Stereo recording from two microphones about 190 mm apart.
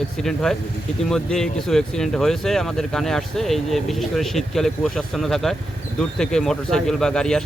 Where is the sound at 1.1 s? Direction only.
5° left (ahead or behind).